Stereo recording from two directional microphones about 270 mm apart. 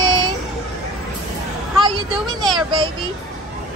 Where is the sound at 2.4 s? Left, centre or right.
Centre.